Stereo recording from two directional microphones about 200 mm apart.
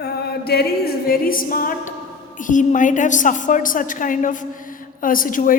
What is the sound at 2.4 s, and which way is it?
A woman's voice, 40° left (ahead or behind).